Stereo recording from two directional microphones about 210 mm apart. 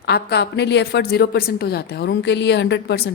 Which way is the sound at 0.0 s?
50° left (ahead or behind).